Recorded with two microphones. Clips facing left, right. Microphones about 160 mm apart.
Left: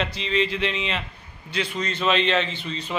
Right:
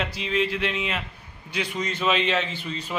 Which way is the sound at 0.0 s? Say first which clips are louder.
Left 1 dB; 10° right (ahead or behind).